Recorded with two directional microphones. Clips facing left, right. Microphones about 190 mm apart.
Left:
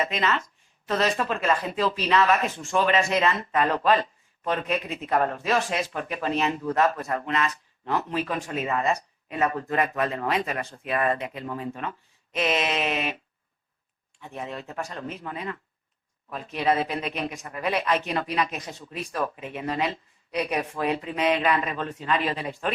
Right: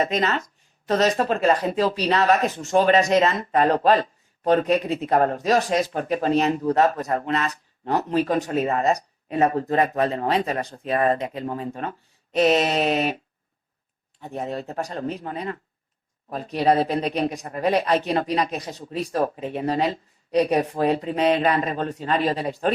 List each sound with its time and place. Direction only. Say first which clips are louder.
0.0 s speech: right 4 dB; 40° right (ahead or behind)